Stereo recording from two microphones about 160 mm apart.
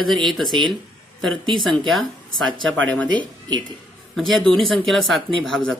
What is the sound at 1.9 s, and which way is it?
Speech, centre (ahead or behind).